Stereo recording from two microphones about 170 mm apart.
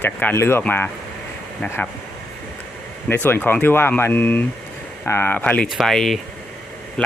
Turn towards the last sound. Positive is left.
turn(degrees=0)  # may be behind; listen again after turning